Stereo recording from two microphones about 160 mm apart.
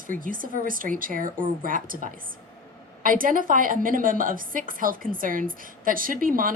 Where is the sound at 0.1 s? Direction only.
60° right (ahead or behind).